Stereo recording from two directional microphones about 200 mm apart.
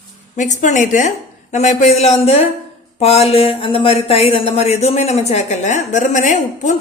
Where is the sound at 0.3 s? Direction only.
35° left (ahead or behind).